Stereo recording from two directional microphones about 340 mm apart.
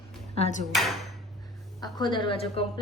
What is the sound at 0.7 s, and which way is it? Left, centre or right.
Speech, centre.